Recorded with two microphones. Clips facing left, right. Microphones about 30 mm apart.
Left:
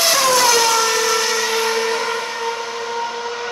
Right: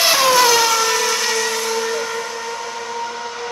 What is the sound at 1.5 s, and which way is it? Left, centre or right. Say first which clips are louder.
Vehicle: left 2 dB; left.